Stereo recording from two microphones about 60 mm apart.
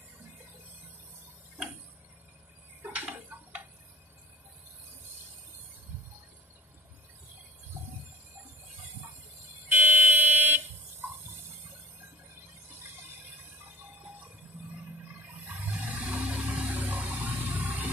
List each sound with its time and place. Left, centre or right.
3.1 s tick-tock: right
9.7 s fire alarm: right
15.4 s a sound: right